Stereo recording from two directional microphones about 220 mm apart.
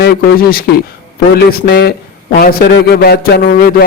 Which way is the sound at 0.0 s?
40° left (ahead or behind).